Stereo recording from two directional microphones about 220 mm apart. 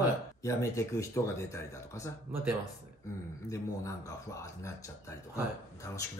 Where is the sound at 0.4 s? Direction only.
15° left (ahead or behind).